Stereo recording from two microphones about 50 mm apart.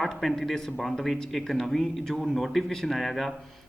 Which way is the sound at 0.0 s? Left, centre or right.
Centre.